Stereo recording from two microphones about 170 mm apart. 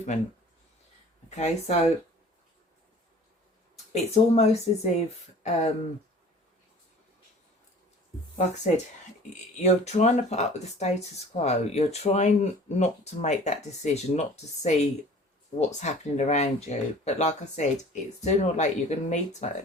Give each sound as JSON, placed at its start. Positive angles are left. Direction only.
{"t": 1.4, "sound": "speech", "side_deg": 40}
{"t": 3.9, "sound": "speech", "side_deg": 40}
{"t": 9.6, "sound": "speech", "side_deg": 45}